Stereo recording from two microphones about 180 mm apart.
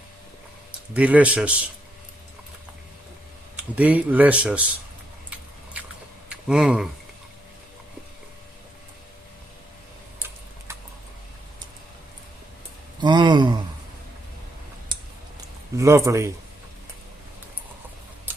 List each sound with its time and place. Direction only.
0.9 s speech: 5° right (ahead or behind)
3.8 s speech: 10° right (ahead or behind)
6.2 s speech: 5° right (ahead or behind)
10.2 s typing: 10° right (ahead or behind)
13.0 s a sound: 25° right (ahead or behind)
15.7 s speech: 15° right (ahead or behind)